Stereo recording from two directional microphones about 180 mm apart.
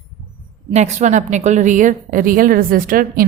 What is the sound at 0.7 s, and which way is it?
A woman's voice, 40° right (ahead or behind).